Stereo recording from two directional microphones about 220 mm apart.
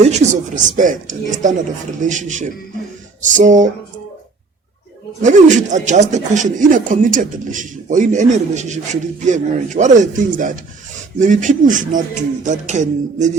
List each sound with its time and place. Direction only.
0.0 s speech: 35° right (ahead or behind)
5.2 s speech: 35° right (ahead or behind)